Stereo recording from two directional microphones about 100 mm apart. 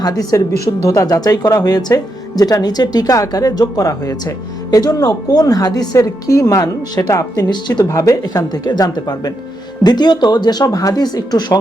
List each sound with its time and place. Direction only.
0.0 s a woman's voice: 40° left (ahead or behind)